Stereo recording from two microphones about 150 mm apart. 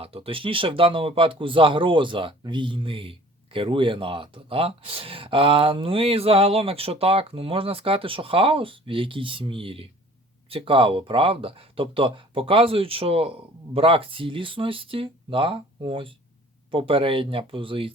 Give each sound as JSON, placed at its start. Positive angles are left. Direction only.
{"t": 0.0, "sound": "speech", "side_deg": -40}